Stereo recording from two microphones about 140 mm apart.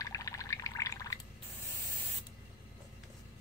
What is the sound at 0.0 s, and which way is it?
Pour, 25° left (ahead or behind).